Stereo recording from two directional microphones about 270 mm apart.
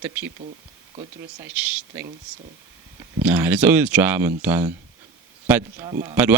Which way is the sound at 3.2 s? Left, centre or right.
Centre.